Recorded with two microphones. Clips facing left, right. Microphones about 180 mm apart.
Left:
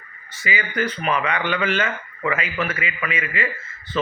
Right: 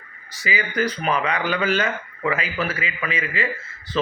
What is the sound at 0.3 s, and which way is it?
A man's voice, 35° right (ahead or behind).